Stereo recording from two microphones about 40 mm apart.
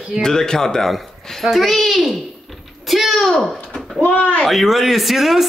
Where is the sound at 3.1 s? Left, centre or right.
Centre.